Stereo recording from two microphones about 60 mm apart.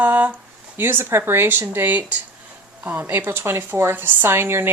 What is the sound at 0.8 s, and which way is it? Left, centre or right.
Speech, right.